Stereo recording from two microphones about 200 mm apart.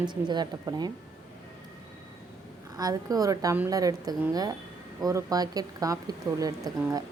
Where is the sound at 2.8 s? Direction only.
20° right (ahead or behind).